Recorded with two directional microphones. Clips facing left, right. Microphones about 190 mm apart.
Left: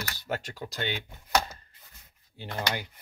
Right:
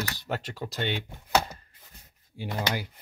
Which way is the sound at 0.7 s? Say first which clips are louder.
Right 3 dB; centre (ahead or behind).